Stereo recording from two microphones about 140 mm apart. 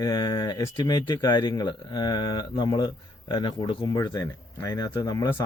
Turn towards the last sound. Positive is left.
turn(degrees=30)  # may be behind; listen again after turning